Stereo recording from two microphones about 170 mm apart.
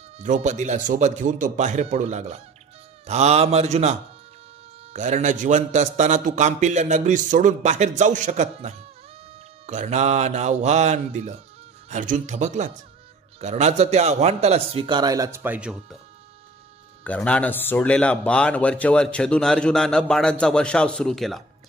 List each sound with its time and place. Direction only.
0.2 s a man's voice: 45° right (ahead or behind)
4.9 s a man's voice: 45° right (ahead or behind); by 16.0 s 5° right (ahead or behind)
17.0 s a man's voice: 10° left (ahead or behind)